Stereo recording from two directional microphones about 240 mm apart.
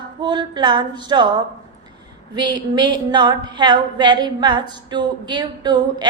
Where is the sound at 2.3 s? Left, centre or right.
Centre.